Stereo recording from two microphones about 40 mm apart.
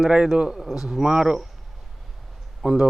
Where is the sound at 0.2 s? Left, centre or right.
Centre.